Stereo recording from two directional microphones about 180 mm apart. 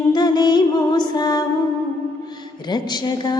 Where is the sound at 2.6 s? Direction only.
25° left (ahead or behind).